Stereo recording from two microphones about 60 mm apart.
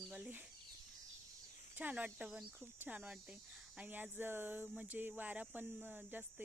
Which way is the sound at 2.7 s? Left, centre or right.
Right.